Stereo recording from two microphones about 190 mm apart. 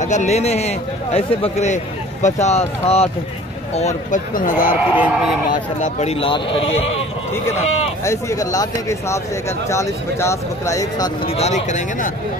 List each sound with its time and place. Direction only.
0.0 s a man's voice: 40° left (ahead or behind)
4.9 s speech: 5° right (ahead or behind)
5.5 s a man's voice: 40° left (ahead or behind)
8.0 s speech: 15° left (ahead or behind)
11.2 s a man's voice: 35° left (ahead or behind)